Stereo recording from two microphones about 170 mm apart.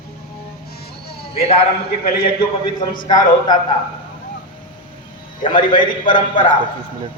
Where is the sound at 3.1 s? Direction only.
25° left (ahead or behind).